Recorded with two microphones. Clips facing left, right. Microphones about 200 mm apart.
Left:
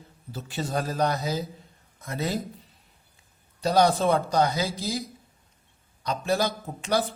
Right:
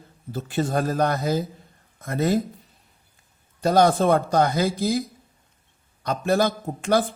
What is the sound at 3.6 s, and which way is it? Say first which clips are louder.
A man's voice: right 3 dB; 50° right (ahead or behind).